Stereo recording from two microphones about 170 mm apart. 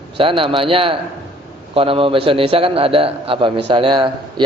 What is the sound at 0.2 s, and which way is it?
A man's voice, 30° right (ahead or behind).